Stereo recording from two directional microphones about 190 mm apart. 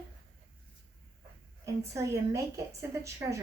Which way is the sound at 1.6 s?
15° right (ahead or behind).